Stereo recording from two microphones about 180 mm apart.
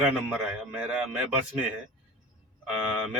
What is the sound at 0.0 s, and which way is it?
A man's voice, 5° right (ahead or behind).